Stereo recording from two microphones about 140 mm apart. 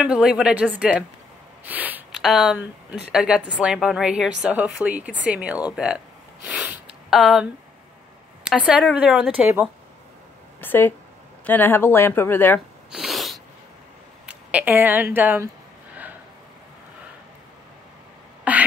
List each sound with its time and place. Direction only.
0.0 s speech: 5° right (ahead or behind)
1.6 s a sound: 10° right (ahead or behind)
2.1 s a woman's voice: centre (ahead or behind)
8.5 s speech: 10° right (ahead or behind)
10.6 s speech: 15° left (ahead or behind)
12.9 s sneeze: centre (ahead or behind)
14.2 s speech: 10° right (ahead or behind)
18.5 s beatboxing: 10° right (ahead or behind)